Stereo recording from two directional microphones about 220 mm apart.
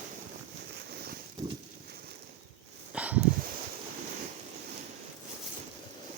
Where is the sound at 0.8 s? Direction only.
45° right (ahead or behind).